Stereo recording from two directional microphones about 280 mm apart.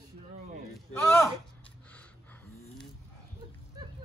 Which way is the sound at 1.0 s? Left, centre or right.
Centre.